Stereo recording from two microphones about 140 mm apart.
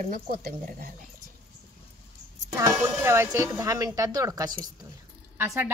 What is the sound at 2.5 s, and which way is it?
Speech, 20° right (ahead or behind).